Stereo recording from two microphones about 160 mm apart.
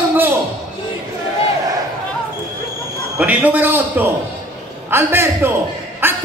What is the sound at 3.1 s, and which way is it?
A man's voice, 10° right (ahead or behind).